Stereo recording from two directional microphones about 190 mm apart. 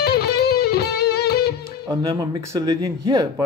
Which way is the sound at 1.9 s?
20° right (ahead or behind).